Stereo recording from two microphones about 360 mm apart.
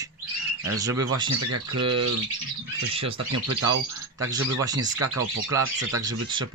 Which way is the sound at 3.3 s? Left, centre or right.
Right.